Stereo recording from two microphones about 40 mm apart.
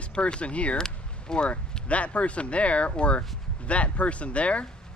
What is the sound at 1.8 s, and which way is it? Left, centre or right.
Speech, left.